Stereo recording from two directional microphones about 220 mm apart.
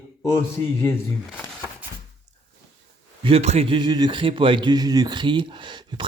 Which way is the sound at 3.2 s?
30° right (ahead or behind).